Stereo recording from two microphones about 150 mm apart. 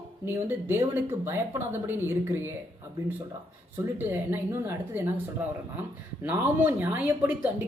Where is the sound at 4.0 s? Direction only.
15° right (ahead or behind).